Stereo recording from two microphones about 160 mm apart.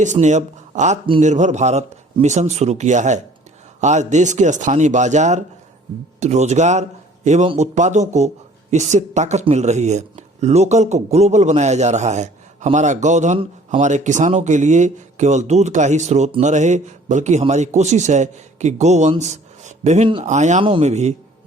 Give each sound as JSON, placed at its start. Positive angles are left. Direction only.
{"t": 0.0, "sound": "a man's voice", "side_deg": -50}
{"t": 19.2, "sound": "a sound", "side_deg": -45}
{"t": 20.2, "sound": "a man's voice", "side_deg": -50}